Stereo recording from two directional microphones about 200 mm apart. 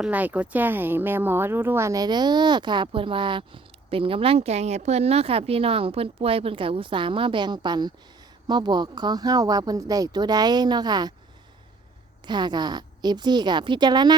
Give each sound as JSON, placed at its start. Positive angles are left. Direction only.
{"t": 0.0, "sound": "speech", "side_deg": -10}
{"t": 12.2, "sound": "speech", "side_deg": -20}